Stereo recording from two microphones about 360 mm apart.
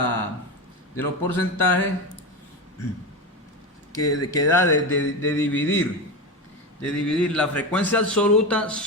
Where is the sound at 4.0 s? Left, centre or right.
Left.